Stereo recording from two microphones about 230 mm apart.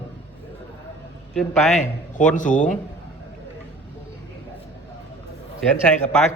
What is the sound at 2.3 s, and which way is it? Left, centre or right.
Speech, left.